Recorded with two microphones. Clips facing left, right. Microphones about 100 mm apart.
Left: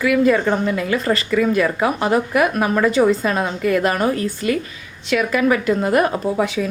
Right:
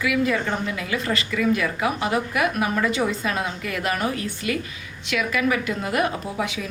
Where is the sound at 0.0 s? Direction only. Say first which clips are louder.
Left 7 dB; 45° left (ahead or behind).